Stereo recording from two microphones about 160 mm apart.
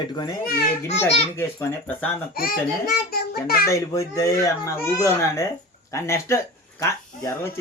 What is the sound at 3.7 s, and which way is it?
Speech, 20° left (ahead or behind).